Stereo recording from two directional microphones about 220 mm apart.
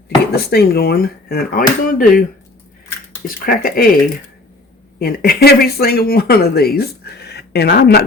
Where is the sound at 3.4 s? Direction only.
40° left (ahead or behind).